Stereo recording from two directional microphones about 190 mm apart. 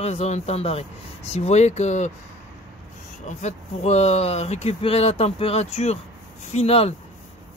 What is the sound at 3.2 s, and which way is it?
Speech, 35° left (ahead or behind).